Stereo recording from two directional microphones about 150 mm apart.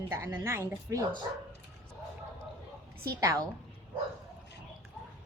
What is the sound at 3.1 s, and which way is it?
Speech, 20° right (ahead or behind).